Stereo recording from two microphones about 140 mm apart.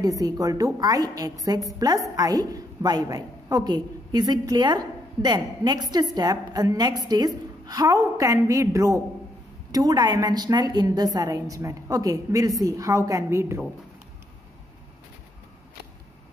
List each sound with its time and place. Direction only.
0.0 s a woman's voice: 25° right (ahead or behind)